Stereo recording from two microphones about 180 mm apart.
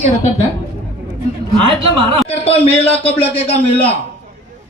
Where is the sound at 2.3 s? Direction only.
35° left (ahead or behind).